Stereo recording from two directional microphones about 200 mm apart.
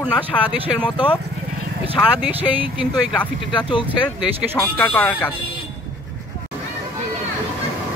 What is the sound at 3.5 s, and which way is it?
Speech, 25° left (ahead or behind).